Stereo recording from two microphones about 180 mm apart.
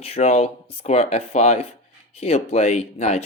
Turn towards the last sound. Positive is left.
turn(degrees=35)  # may be behind; listen again after turning